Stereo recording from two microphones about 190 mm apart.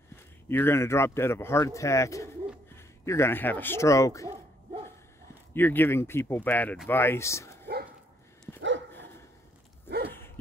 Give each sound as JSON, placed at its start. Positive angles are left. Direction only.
{"t": 0.5, "sound": "speech", "side_deg": 10}
{"t": 5.5, "sound": "speech", "side_deg": 10}
{"t": 8.5, "sound": "dog", "side_deg": -75}
{"t": 10.1, "sound": "dog", "side_deg": 10}